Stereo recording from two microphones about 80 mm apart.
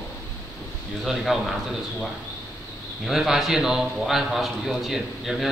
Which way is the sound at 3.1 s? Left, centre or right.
Centre.